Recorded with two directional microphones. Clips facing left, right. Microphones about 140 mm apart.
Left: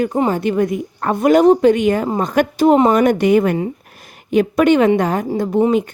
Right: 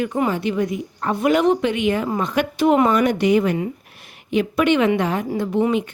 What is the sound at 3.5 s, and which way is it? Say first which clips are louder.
A woman's voice: left 3 dB; 35° left (ahead or behind).